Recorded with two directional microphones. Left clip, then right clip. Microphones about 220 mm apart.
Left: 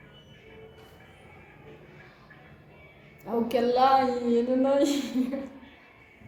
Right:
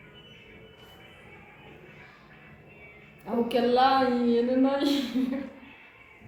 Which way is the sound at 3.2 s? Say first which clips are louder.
Even; 45° left (ahead or behind).